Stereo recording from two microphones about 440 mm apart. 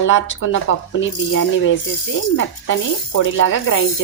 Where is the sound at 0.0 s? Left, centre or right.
Left.